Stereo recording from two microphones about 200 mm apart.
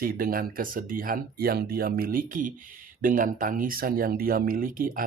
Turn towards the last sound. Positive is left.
turn(degrees=-45)  # may be behind; listen again after turning